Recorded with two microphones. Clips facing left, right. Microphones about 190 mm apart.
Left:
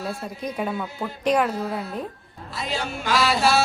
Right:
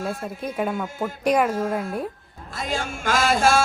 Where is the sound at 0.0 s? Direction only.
50° right (ahead or behind).